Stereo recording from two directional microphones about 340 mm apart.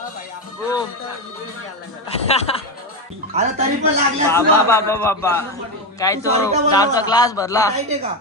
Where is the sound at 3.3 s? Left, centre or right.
Centre.